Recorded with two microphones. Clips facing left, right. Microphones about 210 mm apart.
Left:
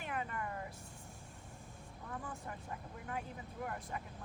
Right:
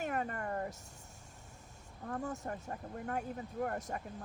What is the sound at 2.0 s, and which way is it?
Speech, 45° right (ahead or behind).